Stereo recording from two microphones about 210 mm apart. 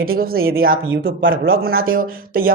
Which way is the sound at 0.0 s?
45° right (ahead or behind).